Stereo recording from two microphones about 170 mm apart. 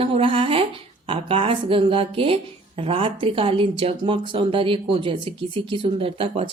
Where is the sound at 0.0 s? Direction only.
35° right (ahead or behind).